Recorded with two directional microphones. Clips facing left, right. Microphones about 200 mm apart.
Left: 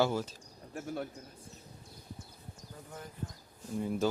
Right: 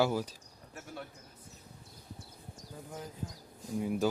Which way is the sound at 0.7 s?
45° left (ahead or behind).